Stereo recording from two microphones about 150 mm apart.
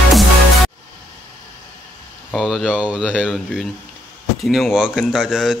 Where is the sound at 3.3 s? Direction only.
5° left (ahead or behind).